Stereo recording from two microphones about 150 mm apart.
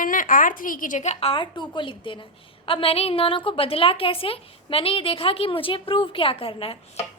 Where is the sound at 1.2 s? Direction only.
35° left (ahead or behind).